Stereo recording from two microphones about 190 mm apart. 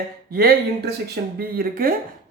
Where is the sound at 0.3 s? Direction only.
50° right (ahead or behind).